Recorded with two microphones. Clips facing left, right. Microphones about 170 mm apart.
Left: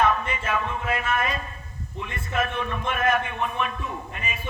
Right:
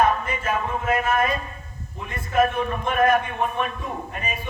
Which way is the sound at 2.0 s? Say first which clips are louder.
Right 7 dB; 40° right (ahead or behind).